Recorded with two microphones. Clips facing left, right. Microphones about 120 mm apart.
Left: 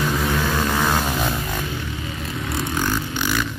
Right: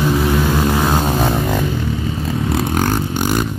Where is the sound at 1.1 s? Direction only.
45° right (ahead or behind).